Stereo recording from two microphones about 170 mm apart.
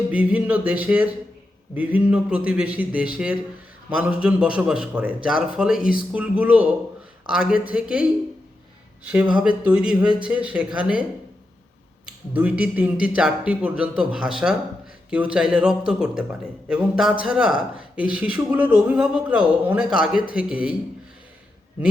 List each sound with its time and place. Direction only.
0.1 s a man's voice: 10° right (ahead or behind)
12.3 s a man's voice: 10° right (ahead or behind)